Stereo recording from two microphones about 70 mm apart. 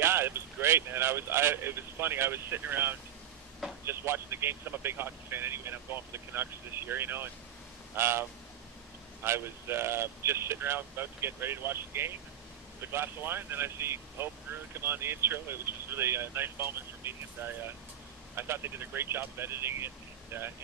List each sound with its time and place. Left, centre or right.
0.0 s speech: right